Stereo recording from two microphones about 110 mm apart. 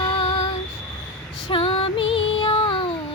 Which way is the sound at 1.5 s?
55° left (ahead or behind).